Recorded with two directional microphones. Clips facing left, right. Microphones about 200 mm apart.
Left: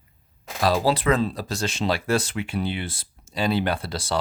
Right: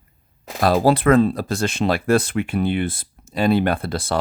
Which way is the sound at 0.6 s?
55° right (ahead or behind).